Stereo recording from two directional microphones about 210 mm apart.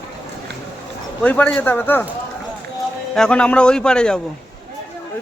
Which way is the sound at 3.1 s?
5° left (ahead or behind).